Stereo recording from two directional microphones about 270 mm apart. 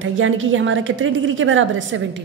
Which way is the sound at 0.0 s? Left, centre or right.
Right.